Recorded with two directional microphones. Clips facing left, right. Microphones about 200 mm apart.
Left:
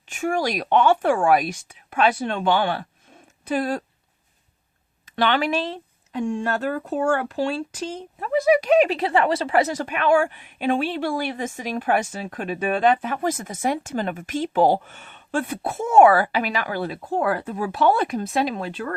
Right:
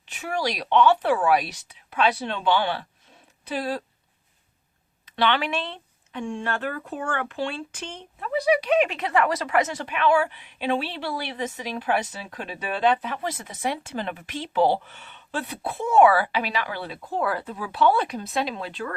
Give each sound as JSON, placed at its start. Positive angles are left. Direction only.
{"t": 0.1, "sound": "speech", "side_deg": 45}
{"t": 5.1, "sound": "speech", "side_deg": 45}